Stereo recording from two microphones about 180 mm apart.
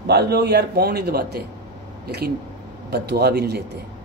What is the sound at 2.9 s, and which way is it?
Speech, 65° right (ahead or behind).